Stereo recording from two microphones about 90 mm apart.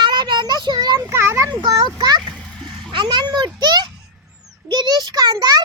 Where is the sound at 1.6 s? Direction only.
50° right (ahead or behind).